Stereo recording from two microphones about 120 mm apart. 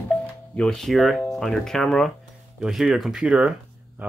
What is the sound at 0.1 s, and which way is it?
Music, 5° left (ahead or behind).